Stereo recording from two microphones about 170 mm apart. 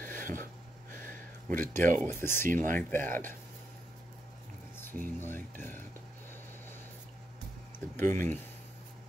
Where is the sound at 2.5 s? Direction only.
50° right (ahead or behind).